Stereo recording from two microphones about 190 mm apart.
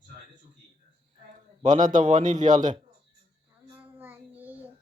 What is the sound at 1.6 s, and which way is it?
A man's voice, 40° right (ahead or behind).